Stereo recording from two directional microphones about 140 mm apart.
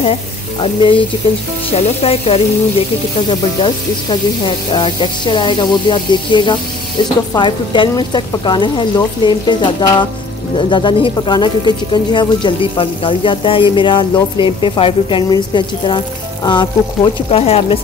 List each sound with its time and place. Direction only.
0.0 s speech: 40° left (ahead or behind)
1.7 s sizzle: 50° left (ahead or behind)
3.2 s speech: 35° left (ahead or behind)